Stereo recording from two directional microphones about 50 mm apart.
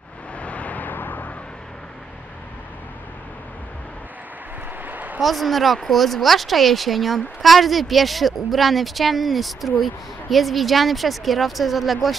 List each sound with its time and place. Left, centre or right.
0.4 s vehicle: left
4.8 s a sound: right
5.2 s speech: centre